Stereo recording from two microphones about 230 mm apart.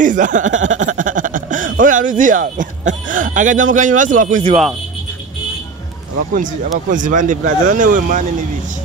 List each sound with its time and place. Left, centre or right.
0.0 s speech: right
0.8 s a sound: right
1.8 s speech: right
6.3 s speech: right